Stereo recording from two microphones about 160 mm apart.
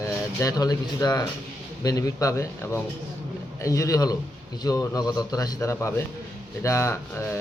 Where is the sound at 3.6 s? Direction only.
20° left (ahead or behind).